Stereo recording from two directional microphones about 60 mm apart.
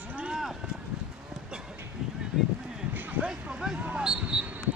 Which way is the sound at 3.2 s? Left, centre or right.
Centre.